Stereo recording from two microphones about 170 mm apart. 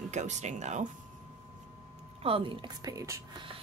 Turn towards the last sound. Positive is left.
turn(degrees=-20)  # may be behind; listen again after turning